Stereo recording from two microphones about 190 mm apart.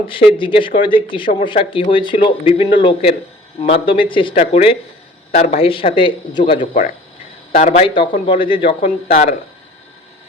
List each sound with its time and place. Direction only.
0.1 s speech: 25° left (ahead or behind)
7.5 s speech: 40° left (ahead or behind)
7.9 s speech: 25° left (ahead or behind)